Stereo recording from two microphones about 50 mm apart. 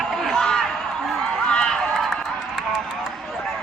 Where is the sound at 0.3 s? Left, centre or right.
Centre.